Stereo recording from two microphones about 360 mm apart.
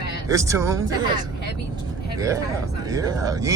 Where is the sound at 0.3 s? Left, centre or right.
Centre.